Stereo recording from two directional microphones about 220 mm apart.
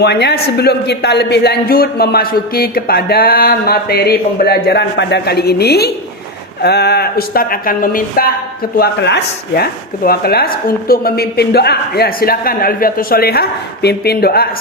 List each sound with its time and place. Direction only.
0.0 s a man's voice: 50° left (ahead or behind)